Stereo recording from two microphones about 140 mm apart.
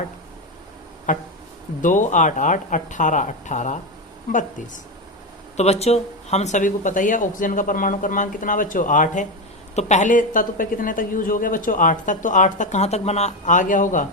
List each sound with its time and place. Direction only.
1.1 s speech: 65° left (ahead or behind)
5.5 s speech: 50° left (ahead or behind); by 14.1 s 65° left (ahead or behind)